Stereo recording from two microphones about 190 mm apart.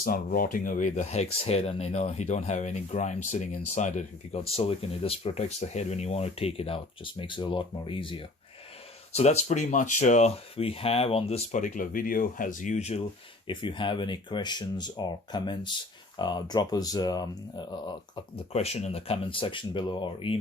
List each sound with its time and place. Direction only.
0.0 s speech: 50° left (ahead or behind); by 17.9 s 20° left (ahead or behind)
18.5 s speech: 35° left (ahead or behind)